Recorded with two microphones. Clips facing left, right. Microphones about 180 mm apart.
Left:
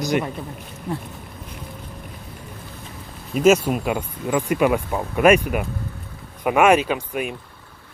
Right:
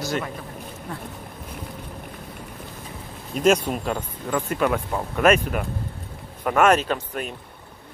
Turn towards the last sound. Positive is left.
turn(degrees=10)  # may be behind; listen again after turning